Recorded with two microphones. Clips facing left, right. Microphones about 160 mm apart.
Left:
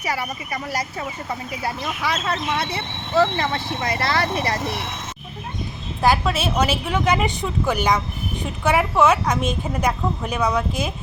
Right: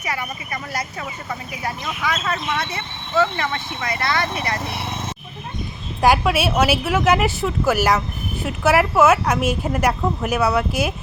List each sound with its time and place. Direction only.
1.6 s speech: 30° left (ahead or behind)
6.0 s a woman's voice: 10° right (ahead or behind)